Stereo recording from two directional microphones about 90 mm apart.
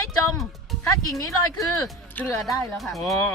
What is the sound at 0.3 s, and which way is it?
Speech, centre (ahead or behind).